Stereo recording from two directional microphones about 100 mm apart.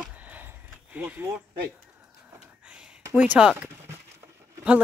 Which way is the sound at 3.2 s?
10° right (ahead or behind).